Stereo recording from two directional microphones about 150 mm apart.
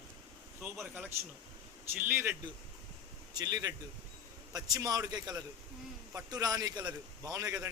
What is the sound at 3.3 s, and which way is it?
A man's voice, 25° right (ahead or behind).